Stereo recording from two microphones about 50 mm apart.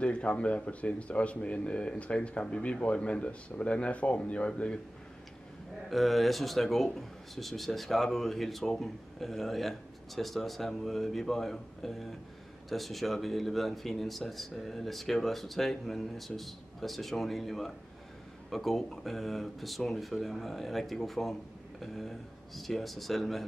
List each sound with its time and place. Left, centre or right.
0.0 s speech: left
5.9 s speech: centre